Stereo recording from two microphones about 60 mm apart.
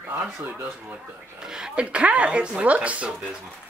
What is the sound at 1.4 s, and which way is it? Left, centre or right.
Speech, centre.